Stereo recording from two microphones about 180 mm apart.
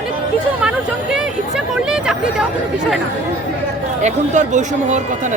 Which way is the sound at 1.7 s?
5° right (ahead or behind).